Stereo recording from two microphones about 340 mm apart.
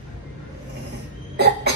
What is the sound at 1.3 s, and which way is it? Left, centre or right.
Cough, right.